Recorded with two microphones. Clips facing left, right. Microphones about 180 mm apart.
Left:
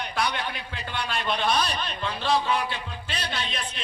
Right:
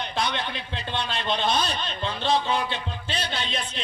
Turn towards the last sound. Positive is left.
turn(degrees=-30)  # may be behind; listen again after turning